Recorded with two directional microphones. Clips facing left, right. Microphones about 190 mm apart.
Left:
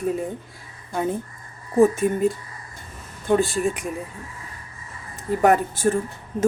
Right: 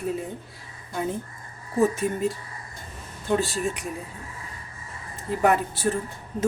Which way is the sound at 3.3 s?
50° left (ahead or behind).